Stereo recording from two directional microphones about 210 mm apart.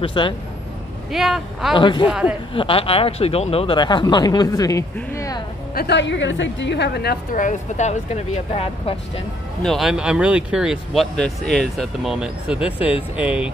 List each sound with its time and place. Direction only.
0.0 s speech: 25° left (ahead or behind)
1.1 s speech: centre (ahead or behind)
1.8 s speech: 25° left (ahead or behind)
2.0 s speech: 5° right (ahead or behind)
2.5 s speech: 25° left (ahead or behind)
5.8 s a woman's voice: 55° left (ahead or behind); by 9.2 s 30° left (ahead or behind)
9.6 s speech: centre (ahead or behind)